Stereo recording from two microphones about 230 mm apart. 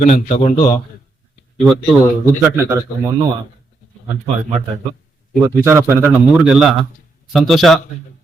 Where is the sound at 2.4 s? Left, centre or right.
Centre.